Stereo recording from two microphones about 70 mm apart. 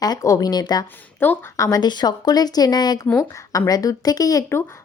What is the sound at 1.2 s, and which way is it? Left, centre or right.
Speech, left.